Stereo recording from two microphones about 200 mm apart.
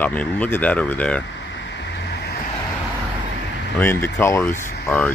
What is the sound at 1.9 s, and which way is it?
Vehicle, 55° left (ahead or behind).